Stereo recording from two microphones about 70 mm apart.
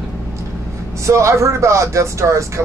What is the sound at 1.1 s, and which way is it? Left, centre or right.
Speech, right.